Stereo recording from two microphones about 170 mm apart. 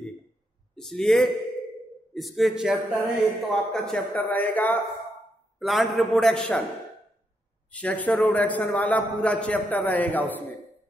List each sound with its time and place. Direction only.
0.7 s speech: centre (ahead or behind)
7.7 s a man's voice: 10° left (ahead or behind)